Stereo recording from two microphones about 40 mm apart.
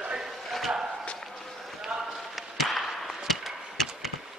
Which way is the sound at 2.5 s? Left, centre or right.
Centre.